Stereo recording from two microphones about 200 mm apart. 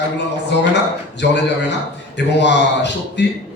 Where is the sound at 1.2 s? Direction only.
60° left (ahead or behind).